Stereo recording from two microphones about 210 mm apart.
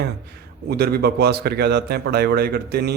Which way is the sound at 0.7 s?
50° right (ahead or behind).